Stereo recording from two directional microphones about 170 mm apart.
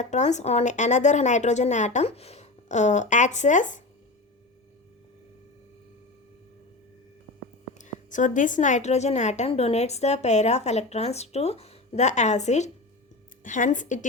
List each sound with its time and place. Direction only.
0.0 s a woman's voice: 45° left (ahead or behind)
7.7 s a woman's voice: 45° left (ahead or behind)